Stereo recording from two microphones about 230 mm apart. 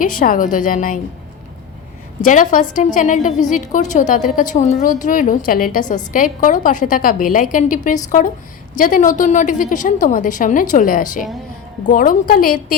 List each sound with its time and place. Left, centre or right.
0.2 s a woman's voice: left
2.2 s a woman's voice: left